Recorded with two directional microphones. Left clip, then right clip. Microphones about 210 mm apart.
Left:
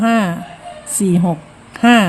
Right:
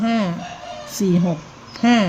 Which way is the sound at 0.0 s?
25° left (ahead or behind).